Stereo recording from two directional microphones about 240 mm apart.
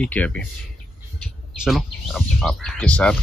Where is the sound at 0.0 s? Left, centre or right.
Centre.